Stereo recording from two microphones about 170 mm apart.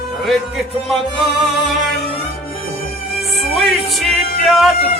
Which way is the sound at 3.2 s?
Centre (ahead or behind).